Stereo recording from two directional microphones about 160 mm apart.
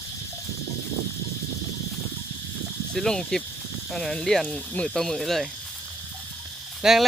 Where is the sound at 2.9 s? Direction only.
5° left (ahead or behind).